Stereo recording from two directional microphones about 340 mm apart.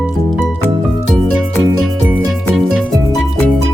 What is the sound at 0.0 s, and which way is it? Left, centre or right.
Music, centre.